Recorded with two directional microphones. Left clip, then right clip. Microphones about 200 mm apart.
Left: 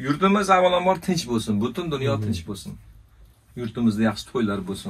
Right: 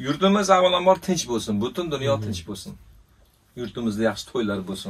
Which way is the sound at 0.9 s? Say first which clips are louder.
Right 1 dB; 30° right (ahead or behind).